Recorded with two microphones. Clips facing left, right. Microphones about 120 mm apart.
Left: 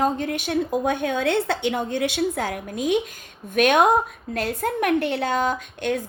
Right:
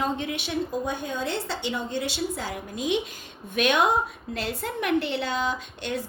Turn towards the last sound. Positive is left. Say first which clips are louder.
# left 5 dB
turn(degrees=50)  # may be behind; listen again after turning